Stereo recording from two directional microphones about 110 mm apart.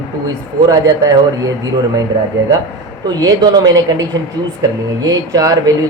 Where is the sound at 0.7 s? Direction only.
35° right (ahead or behind).